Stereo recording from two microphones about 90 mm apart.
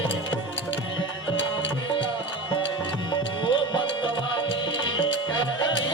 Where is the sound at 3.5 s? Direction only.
65° left (ahead or behind).